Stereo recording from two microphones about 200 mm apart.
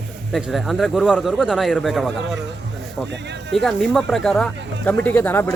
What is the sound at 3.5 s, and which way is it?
Speech, 5° left (ahead or behind).